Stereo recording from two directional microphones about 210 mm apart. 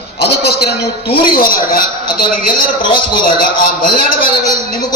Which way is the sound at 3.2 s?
45° left (ahead or behind).